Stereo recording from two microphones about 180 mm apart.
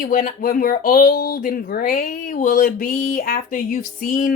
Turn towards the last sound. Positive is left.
turn(degrees=50)  # may be behind; listen again after turning